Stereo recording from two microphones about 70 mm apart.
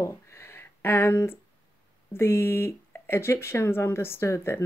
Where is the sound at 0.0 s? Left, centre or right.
Left.